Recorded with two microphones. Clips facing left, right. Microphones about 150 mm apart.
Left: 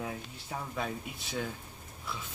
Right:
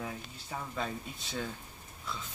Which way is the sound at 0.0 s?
5° left (ahead or behind).